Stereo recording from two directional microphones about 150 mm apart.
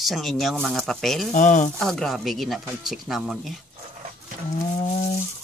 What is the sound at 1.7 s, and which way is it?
Speech, centre (ahead or behind).